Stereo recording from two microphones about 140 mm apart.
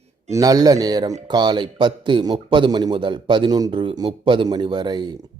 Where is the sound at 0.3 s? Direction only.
25° right (ahead or behind).